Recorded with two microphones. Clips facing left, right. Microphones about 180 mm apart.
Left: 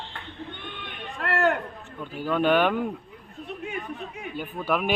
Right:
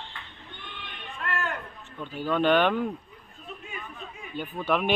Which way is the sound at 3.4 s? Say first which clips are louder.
Left 7 dB; 70° left (ahead or behind).